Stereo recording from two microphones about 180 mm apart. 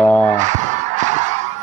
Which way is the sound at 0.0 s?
5° left (ahead or behind).